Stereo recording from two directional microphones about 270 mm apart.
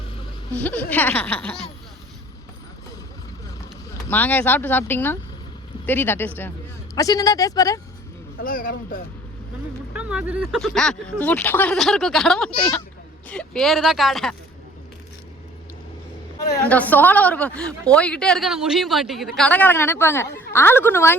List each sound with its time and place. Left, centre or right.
0.5 s speech: centre
4.1 s speech: centre
8.4 s speech: left
9.9 s speech: centre
16.6 s speech: centre